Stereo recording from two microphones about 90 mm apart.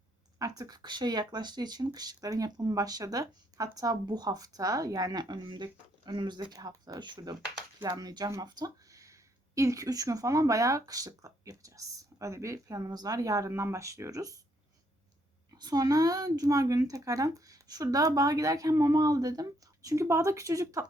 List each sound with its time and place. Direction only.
0.3 s speech: 40° right (ahead or behind)
8.4 s a sound: 50° right (ahead or behind)
9.6 s speech: 40° right (ahead or behind)
15.5 s speech: 45° right (ahead or behind)